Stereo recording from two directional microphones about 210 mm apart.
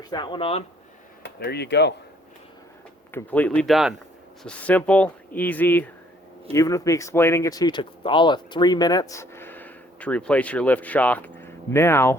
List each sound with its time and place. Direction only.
0.0 s speech: 20° left (ahead or behind)
1.2 s speech: 50° left (ahead or behind)
3.1 s speech: 10° left (ahead or behind)